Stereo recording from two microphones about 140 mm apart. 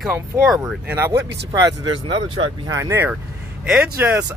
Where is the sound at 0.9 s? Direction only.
20° right (ahead or behind); by 2.5 s 35° right (ahead or behind).